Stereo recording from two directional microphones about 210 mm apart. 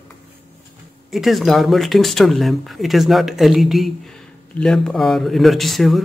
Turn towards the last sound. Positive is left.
turn(degrees=0)  # may be behind; listen again after turning